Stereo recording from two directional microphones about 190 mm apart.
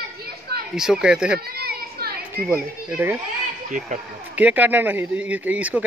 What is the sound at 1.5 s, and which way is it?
Children playing, 55° right (ahead or behind).